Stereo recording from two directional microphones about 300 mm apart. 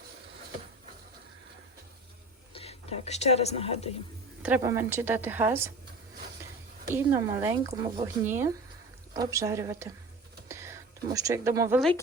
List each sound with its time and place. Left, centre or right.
2.5 s speech: centre
4.4 s speech: centre
6.9 s speech: centre